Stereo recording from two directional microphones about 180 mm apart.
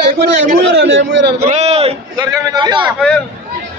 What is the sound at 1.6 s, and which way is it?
A man's voice, 35° right (ahead or behind).